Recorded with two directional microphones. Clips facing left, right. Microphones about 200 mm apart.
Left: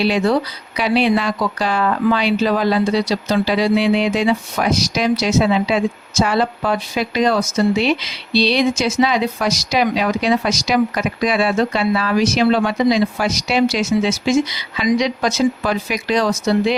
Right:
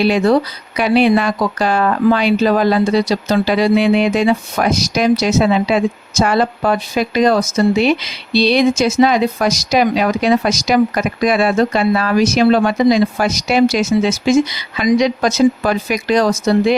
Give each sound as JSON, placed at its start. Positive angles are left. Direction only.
{"t": 0.0, "sound": "speech", "side_deg": -50}